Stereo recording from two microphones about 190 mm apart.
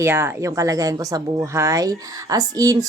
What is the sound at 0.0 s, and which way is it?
Speech, 10° right (ahead or behind).